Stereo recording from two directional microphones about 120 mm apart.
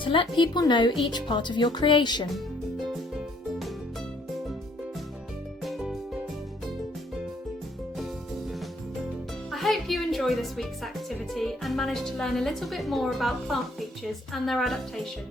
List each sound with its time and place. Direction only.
0.0 s speech: 45° left (ahead or behind)
2.8 s music: 5° right (ahead or behind)
5.6 s music: centre (ahead or behind)
9.5 s a woman's voice: centre (ahead or behind)